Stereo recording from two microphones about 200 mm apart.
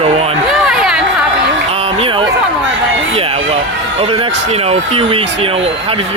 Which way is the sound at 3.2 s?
30° right (ahead or behind).